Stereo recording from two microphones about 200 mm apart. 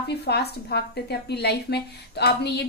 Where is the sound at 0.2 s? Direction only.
55° left (ahead or behind).